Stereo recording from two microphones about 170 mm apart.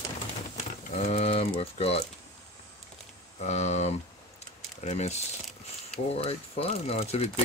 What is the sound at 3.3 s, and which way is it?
Speech, 40° left (ahead or behind).